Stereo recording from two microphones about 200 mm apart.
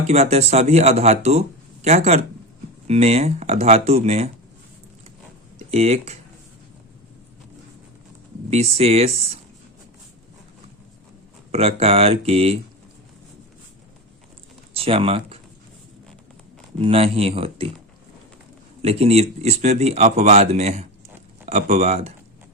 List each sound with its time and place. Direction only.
0.1 s speech: 30° right (ahead or behind)
5.5 s speech: 30° right (ahead or behind)
8.4 s speech: 30° right (ahead or behind)
11.5 s speech: 30° right (ahead or behind)
14.7 s speech: 30° right (ahead or behind)
16.7 s speech: 30° right (ahead or behind)
18.8 s speech: 30° right (ahead or behind)